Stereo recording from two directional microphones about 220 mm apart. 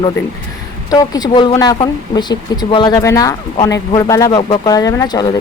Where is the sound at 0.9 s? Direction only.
15° left (ahead or behind).